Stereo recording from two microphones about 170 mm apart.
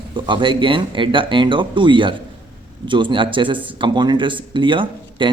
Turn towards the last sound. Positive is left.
turn(degrees=-30)  # may be behind; listen again after turning